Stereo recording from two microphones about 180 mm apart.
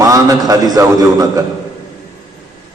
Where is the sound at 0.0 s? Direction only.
20° right (ahead or behind).